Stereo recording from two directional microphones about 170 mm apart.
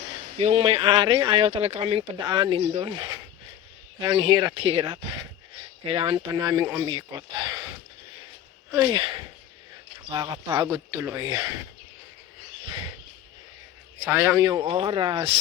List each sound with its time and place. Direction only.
0.3 s speech: 40° right (ahead or behind)
6.5 s speech: 20° right (ahead or behind)
8.7 s speech: 25° right (ahead or behind)
14.1 s a man's voice: 10° right (ahead or behind)
14.7 s speech: 30° right (ahead or behind)